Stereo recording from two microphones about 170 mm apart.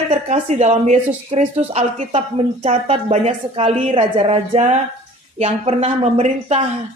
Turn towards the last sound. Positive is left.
turn(degrees=-40)  # may be behind; listen again after turning